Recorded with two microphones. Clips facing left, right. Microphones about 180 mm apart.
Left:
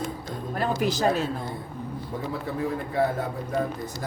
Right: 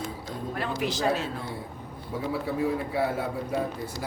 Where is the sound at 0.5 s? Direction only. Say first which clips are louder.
Left 5 dB; 40° left (ahead or behind).